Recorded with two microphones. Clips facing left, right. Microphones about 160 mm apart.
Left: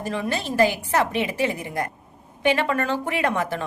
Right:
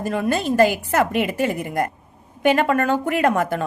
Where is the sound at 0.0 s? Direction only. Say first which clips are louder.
Right 5 dB; 50° right (ahead or behind).